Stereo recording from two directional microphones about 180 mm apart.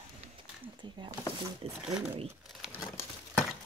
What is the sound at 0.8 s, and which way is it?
Speech, 25° right (ahead or behind).